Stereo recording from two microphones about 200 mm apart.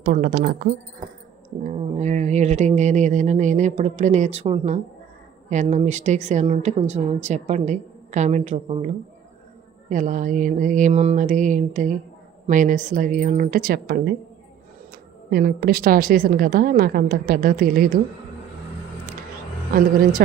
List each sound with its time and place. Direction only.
0.0 s a woman's voice: 45° right (ahead or behind)
1.6 s a woman's voice: 35° right (ahead or behind)
15.3 s a woman's voice: 45° right (ahead or behind)
19.7 s a woman's voice: 45° right (ahead or behind)